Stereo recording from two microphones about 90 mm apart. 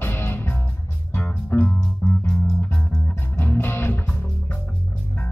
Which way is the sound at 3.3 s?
25° left (ahead or behind).